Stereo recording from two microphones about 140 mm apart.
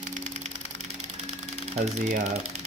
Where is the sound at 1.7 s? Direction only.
50° right (ahead or behind).